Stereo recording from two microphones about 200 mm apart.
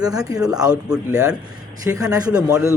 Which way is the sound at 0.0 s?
20° right (ahead or behind).